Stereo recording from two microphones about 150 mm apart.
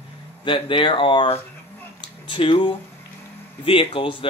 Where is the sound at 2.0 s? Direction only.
35° left (ahead or behind).